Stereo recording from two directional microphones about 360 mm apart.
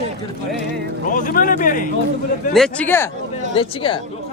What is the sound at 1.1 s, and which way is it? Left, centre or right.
Speech, left.